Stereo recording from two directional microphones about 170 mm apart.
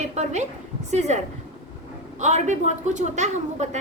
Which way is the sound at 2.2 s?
45° right (ahead or behind).